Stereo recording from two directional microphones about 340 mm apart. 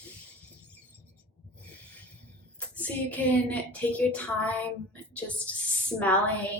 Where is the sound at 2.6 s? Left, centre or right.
Centre.